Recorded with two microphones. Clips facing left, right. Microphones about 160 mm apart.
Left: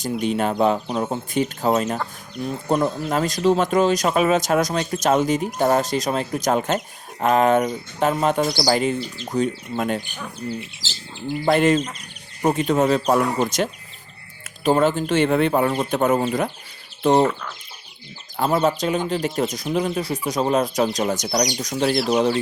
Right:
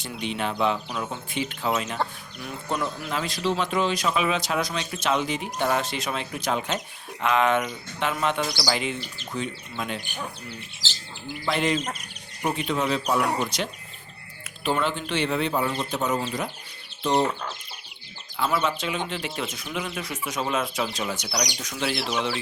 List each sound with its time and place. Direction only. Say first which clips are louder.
0.0 s speech: left 8 dB; 45° left (ahead or behind)
11.4 s speech: left 8 dB; 50° left (ahead or behind)
18.3 s speech: left 6 dB; 40° left (ahead or behind)